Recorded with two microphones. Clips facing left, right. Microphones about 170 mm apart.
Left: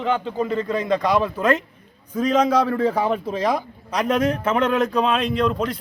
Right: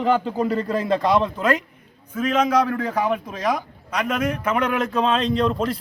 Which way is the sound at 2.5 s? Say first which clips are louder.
Left 2 dB; 30° left (ahead or behind).